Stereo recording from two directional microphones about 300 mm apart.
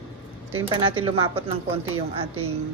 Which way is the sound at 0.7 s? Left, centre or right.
Centre.